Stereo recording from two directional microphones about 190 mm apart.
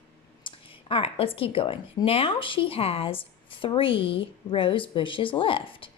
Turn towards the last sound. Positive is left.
turn(degrees=25)  # may be behind; listen again after turning